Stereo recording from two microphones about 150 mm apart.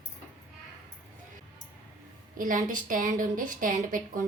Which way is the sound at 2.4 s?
65° right (ahead or behind).